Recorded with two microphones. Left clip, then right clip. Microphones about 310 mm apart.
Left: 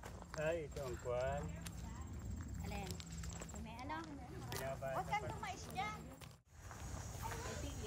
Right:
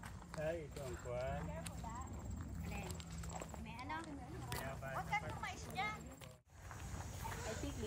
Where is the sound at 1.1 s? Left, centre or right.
Left.